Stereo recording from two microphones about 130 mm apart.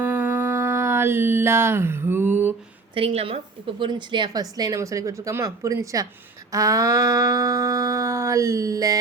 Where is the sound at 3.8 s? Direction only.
35° right (ahead or behind).